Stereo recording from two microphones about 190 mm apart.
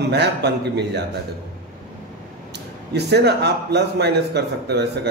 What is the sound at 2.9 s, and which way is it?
A man's voice, 60° right (ahead or behind).